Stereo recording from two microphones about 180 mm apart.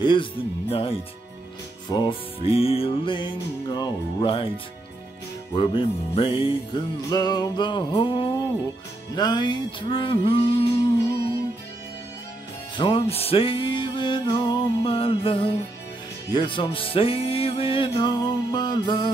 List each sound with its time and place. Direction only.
0.0 s music: 25° left (ahead or behind)
5.5 s music: 25° left (ahead or behind)
12.7 s music: 30° left (ahead or behind)